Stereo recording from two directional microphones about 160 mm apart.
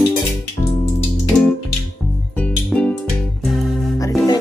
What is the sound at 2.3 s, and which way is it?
Music, 5° left (ahead or behind).